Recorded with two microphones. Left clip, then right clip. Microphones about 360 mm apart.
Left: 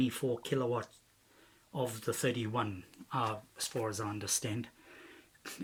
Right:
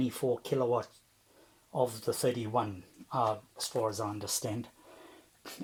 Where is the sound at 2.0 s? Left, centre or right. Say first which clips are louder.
Right 3 dB; centre.